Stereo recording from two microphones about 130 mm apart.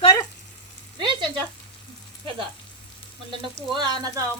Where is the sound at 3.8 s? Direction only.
35° right (ahead or behind).